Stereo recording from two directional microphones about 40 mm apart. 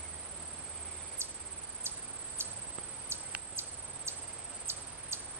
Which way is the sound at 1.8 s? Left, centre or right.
Right.